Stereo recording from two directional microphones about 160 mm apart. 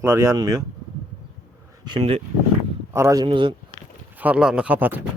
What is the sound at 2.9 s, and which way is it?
Speech, 20° right (ahead or behind).